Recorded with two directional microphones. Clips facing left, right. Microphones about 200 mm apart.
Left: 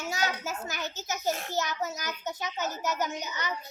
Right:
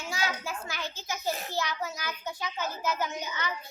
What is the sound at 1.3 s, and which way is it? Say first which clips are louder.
Speech: left 2 dB; centre (ahead or behind).